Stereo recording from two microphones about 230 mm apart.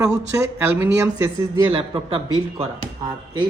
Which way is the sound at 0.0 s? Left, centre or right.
Centre.